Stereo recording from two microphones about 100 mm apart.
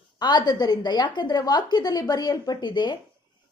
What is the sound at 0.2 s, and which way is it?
A woman's voice, 45° left (ahead or behind).